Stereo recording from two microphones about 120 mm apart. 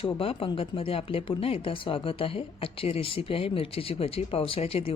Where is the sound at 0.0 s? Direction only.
50° left (ahead or behind).